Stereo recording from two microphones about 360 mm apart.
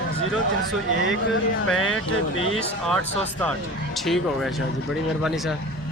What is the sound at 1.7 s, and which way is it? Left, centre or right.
Speech, left.